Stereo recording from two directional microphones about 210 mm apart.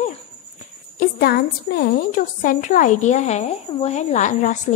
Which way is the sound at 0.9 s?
45° left (ahead or behind).